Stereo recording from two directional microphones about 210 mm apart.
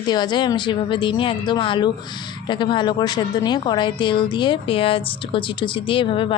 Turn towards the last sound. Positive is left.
turn(degrees=25)  # may be behind; listen again after turning